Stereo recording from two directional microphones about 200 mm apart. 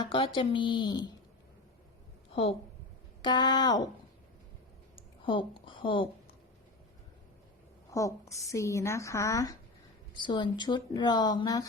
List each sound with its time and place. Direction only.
0.0 s speech: 25° left (ahead or behind)
2.3 s a woman's voice: 30° left (ahead or behind)
4.9 s a sound: 25° left (ahead or behind)
7.9 s a woman's voice: 15° left (ahead or behind)